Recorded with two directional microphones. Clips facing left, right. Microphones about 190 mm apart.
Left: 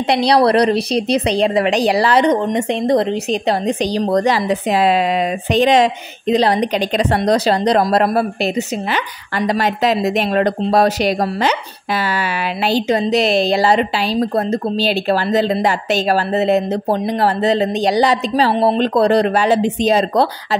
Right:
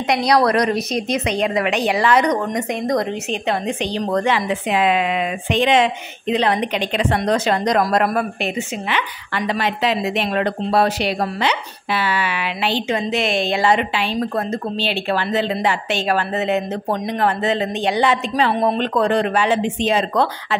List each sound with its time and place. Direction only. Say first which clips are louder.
0.1 s a woman's voice: left 3 dB; 30° left (ahead or behind)